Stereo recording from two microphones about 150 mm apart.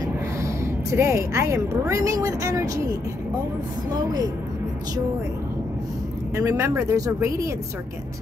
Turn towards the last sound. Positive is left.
turn(degrees=-20)  # may be behind; listen again after turning